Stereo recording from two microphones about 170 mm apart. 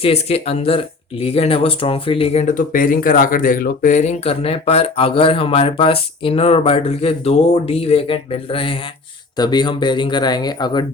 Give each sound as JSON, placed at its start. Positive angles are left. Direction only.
{"t": 0.0, "sound": "speech", "side_deg": 35}